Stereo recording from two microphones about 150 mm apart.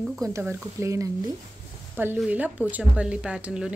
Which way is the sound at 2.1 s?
10° right (ahead or behind).